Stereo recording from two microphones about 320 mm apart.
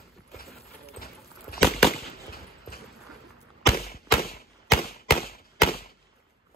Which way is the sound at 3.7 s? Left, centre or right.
Left.